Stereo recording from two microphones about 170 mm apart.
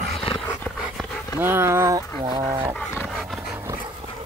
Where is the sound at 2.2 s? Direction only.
30° right (ahead or behind).